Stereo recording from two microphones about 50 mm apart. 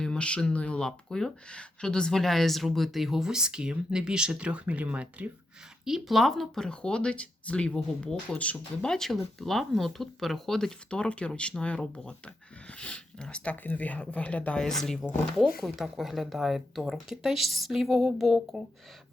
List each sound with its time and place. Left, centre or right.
0.0 s speech: centre; by 5.3 s right
5.8 s speech: centre
6.7 s speech: centre
8.8 s speech: centre
14.6 s speech: centre
15.4 s speech: centre